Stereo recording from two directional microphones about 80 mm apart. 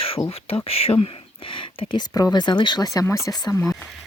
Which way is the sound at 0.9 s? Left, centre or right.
Left.